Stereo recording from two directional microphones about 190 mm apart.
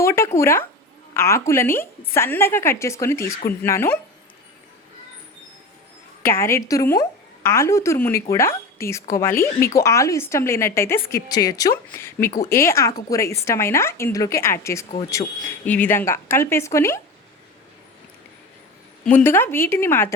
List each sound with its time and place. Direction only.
0.0 s a sound: 15° left (ahead or behind)
1.1 s a woman's voice: 15° left (ahead or behind)
6.2 s a woman's voice: 15° left (ahead or behind)
19.0 s a woman's voice: 10° left (ahead or behind)